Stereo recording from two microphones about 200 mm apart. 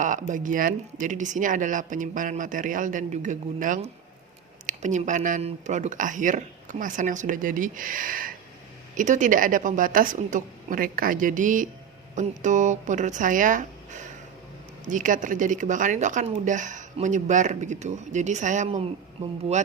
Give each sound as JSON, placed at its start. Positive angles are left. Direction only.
{"t": 0.0, "sound": "speech", "side_deg": -40}